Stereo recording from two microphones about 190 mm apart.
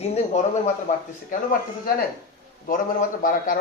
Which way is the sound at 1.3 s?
45° left (ahead or behind).